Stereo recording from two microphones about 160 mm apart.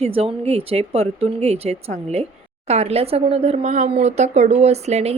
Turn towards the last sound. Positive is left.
turn(degrees=-45)  # may be behind; listen again after turning